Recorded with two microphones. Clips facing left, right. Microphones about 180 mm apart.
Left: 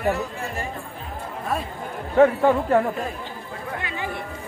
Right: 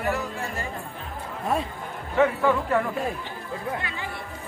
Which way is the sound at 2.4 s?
35° left (ahead or behind).